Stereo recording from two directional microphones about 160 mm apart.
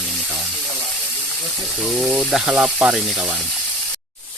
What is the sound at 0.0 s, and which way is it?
Steam, 5° left (ahead or behind).